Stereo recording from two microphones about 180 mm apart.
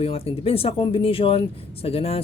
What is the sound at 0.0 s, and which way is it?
Speech, 35° left (ahead or behind).